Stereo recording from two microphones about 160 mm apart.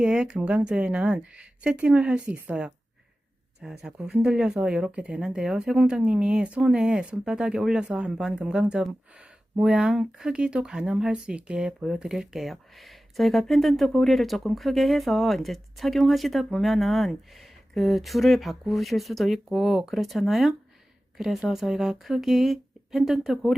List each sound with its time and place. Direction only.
0.0 s speech: 5° right (ahead or behind)